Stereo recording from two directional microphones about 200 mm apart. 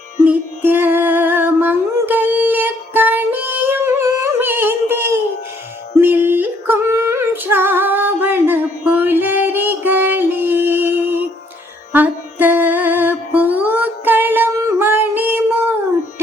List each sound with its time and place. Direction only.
0.3 s music: 10° right (ahead or behind)
6.0 s yodeling: 10° right (ahead or behind)
11.9 s music: 10° right (ahead or behind)